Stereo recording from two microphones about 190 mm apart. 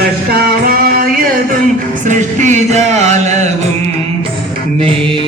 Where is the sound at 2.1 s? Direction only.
40° right (ahead or behind).